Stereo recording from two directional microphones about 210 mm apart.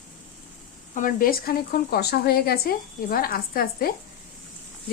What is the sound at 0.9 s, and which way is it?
Speech, 40° left (ahead or behind).